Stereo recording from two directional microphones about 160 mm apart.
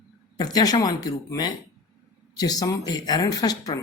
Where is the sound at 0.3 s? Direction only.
25° left (ahead or behind).